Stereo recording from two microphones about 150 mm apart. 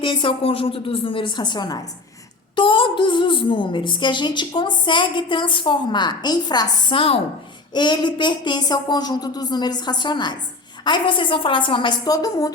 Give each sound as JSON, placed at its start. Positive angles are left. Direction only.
{"t": 0.0, "sound": "a woman's voice", "side_deg": 35}